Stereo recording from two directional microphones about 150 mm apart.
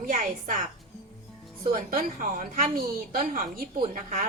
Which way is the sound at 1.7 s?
70° right (ahead or behind).